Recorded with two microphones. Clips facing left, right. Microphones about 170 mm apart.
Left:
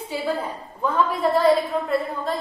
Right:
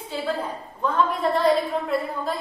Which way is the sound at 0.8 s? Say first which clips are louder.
Left 1 dB; 5° left (ahead or behind).